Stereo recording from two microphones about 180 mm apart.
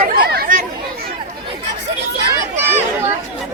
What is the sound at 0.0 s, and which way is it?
Chatter, 60° right (ahead or behind).